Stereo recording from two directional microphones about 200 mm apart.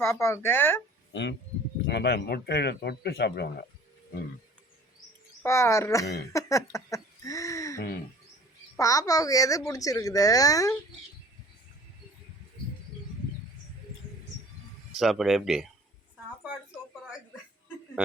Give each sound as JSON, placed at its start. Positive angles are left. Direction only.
{"t": 0.0, "sound": "speech", "side_deg": 15}
{"t": 1.1, "sound": "speech", "side_deg": 60}
{"t": 5.4, "sound": "speech", "side_deg": 15}
{"t": 6.7, "sound": "a sound", "side_deg": 15}
{"t": 8.8, "sound": "speech", "side_deg": 15}
{"t": 14.9, "sound": "speech", "side_deg": 0}